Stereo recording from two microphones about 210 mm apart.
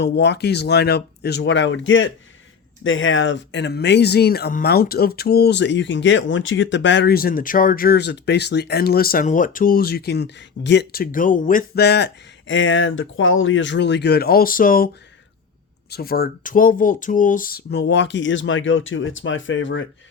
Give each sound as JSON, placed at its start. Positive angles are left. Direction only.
{"t": 0.0, "sound": "speech", "side_deg": 50}
{"t": 15.9, "sound": "speech", "side_deg": 45}